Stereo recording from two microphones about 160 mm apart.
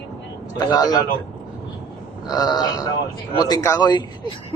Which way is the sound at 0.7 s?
25° left (ahead or behind).